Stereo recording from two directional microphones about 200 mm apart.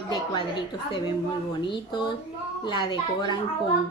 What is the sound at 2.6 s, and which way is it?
Speech, 20° left (ahead or behind).